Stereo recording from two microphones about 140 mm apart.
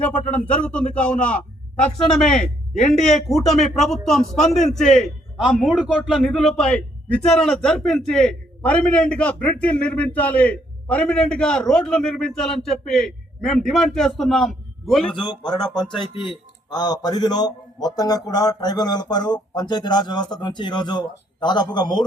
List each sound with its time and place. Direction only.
0.0 s speech: 10° left (ahead or behind)
2.7 s speech: 55° left (ahead or behind)
3.0 s speech: centre (ahead or behind)
15.2 s a man's voice: 30° left (ahead or behind)